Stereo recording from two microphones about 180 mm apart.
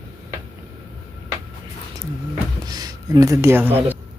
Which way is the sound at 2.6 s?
20° right (ahead or behind).